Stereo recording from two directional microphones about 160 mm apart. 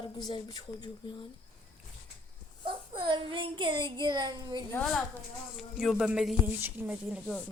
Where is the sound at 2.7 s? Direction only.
30° right (ahead or behind).